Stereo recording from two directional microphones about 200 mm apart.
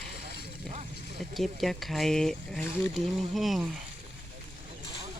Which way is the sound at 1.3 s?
Centre (ahead or behind).